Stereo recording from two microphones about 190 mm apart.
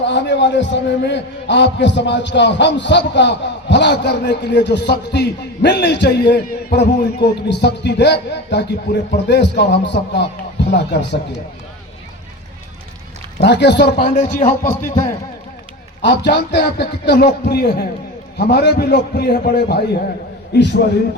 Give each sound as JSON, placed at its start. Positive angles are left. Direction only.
{"t": 0.0, "sound": "a man's voice", "side_deg": 70}
{"t": 13.4, "sound": "a man's voice", "side_deg": 65}
{"t": 14.1, "sound": "a man's voice", "side_deg": 40}
{"t": 16.0, "sound": "a man's voice", "side_deg": 65}